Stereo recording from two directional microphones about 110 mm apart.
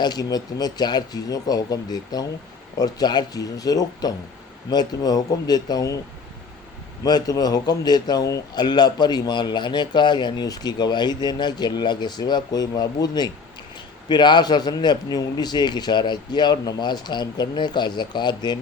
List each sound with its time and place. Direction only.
0.0 s a man's voice: 35° left (ahead or behind)
7.0 s a man's voice: 35° left (ahead or behind)